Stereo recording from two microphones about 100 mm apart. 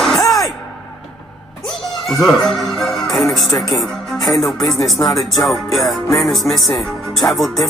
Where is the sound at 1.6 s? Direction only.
Centre (ahead or behind).